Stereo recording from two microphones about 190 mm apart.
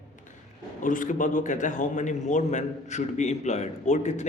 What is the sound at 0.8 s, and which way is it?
A man's voice, 45° left (ahead or behind).